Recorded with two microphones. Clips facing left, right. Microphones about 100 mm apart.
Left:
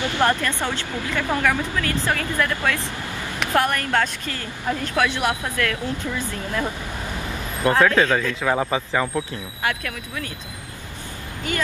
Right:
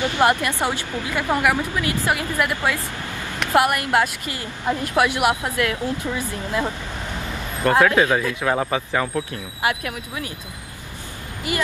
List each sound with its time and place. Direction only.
0.0 s a woman's voice: 20° right (ahead or behind)
7.7 s a woman's voice: 15° right (ahead or behind)
8.9 s speech: centre (ahead or behind)
9.6 s a woman's voice: 20° right (ahead or behind)
11.5 s a woman's voice: 10° right (ahead or behind)